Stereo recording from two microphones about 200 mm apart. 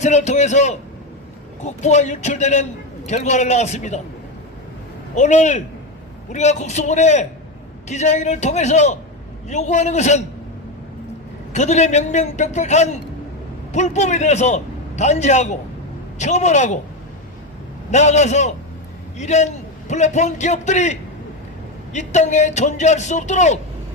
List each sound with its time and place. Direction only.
0.0 s a man's voice: 35° left (ahead or behind)
5.1 s a man's voice: 35° left (ahead or behind)
11.5 s a man's voice: 35° left (ahead or behind)
17.9 s a man's voice: 35° left (ahead or behind)